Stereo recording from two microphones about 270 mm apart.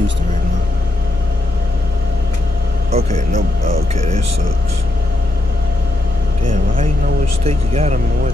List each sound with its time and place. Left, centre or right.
2.9 s speech: right
7.4 s speech: right